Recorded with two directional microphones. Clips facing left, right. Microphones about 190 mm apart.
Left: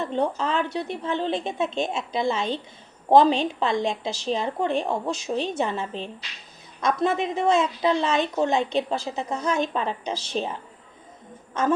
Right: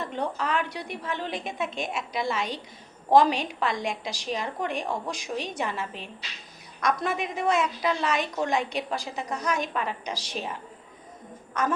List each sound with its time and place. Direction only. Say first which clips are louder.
0.0 s a woman's voice: left 5 dB; 25° left (ahead or behind)